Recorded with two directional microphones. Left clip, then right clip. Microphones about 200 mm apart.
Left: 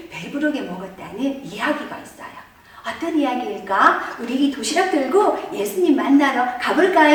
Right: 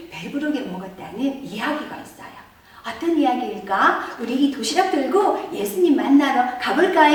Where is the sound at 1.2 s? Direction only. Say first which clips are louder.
Left 2 dB; centre (ahead or behind).